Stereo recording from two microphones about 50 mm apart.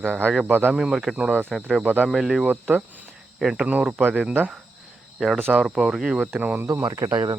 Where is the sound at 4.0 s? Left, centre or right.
Right.